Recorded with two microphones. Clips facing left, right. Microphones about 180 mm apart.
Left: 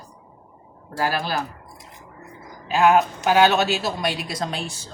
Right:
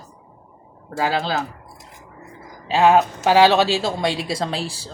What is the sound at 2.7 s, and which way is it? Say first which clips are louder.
Speech: right 2 dB; 25° right (ahead or behind).